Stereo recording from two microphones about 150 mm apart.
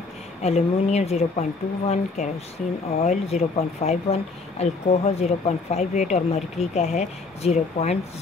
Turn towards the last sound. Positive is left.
turn(degrees=45)  # may be behind; listen again after turning